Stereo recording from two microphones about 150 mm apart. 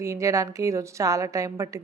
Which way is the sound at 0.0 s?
20° right (ahead or behind).